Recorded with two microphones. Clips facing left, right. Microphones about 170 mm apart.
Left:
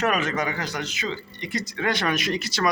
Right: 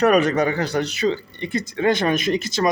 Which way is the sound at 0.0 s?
35° right (ahead or behind).